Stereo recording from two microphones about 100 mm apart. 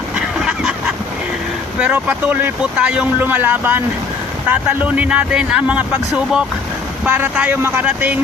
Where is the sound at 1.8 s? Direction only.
15° right (ahead or behind).